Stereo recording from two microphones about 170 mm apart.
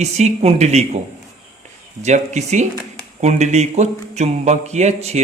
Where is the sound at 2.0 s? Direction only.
45° right (ahead or behind).